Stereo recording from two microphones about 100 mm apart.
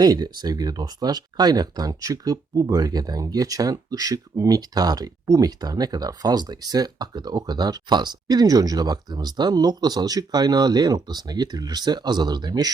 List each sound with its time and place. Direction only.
0.0 s speech: 45° right (ahead or behind)